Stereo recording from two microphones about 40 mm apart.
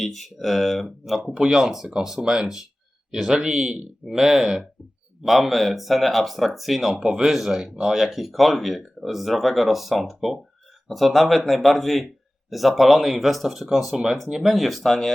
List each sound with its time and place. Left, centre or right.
0.0 s speech: centre
5.2 s speech: centre
6.9 s speech: right
7.3 s speech: centre
14.8 s speech: centre